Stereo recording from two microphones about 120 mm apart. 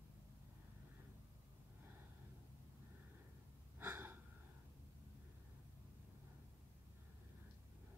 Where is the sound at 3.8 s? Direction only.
15° right (ahead or behind).